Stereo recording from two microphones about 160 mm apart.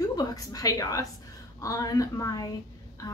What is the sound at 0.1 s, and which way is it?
A woman's voice, 25° left (ahead or behind).